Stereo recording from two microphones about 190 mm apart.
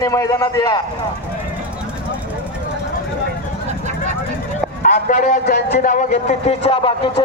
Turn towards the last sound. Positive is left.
turn(degrees=25)  # may be behind; listen again after turning